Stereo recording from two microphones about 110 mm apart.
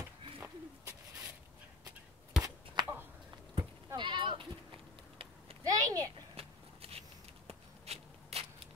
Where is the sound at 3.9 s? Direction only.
45° right (ahead or behind).